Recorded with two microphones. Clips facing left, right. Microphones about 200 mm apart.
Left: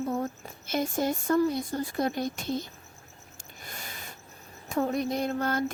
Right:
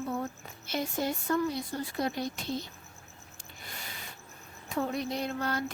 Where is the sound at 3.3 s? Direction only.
45° left (ahead or behind).